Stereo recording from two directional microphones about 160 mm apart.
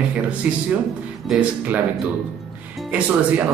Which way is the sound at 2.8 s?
10° right (ahead or behind).